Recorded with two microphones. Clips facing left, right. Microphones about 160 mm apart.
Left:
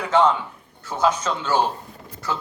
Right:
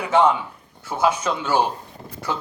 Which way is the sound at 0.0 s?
10° right (ahead or behind).